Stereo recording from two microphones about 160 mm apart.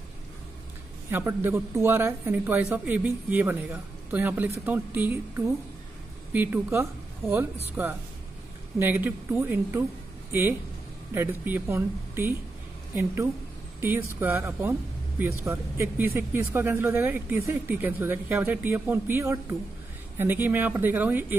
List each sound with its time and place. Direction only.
1.1 s speech: 15° right (ahead or behind)
6.3 s speech: 10° right (ahead or behind)
11.1 s speech: 15° right (ahead or behind)